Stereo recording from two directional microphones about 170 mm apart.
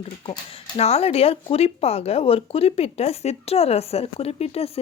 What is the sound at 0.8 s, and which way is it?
Speech, 35° left (ahead or behind).